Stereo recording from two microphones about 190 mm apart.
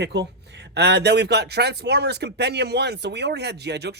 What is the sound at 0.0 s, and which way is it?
Speech, 65° right (ahead or behind).